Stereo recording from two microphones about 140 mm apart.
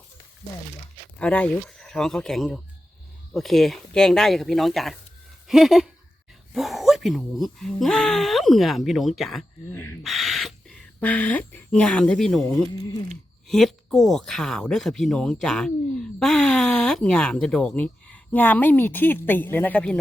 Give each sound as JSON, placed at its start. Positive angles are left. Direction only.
{"t": 1.2, "sound": "speech", "side_deg": 10}
{"t": 9.7, "sound": "speech", "side_deg": 15}
{"t": 10.0, "sound": "bird", "side_deg": 0}
{"t": 13.5, "sound": "speech", "side_deg": 0}